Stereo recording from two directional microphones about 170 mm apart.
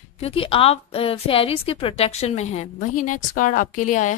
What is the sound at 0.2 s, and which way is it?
A woman's voice, 35° left (ahead or behind).